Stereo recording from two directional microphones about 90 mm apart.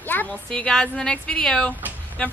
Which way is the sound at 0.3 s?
10° left (ahead or behind).